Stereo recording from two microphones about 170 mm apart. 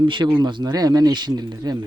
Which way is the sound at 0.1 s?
25° right (ahead or behind).